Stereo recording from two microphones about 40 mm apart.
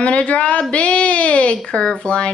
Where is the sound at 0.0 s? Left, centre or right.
Left.